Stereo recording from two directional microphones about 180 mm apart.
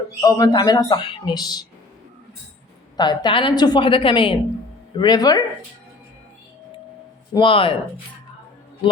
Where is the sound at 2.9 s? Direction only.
25° left (ahead or behind).